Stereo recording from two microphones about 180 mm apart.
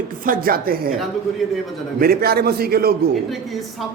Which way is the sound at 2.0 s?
55° right (ahead or behind).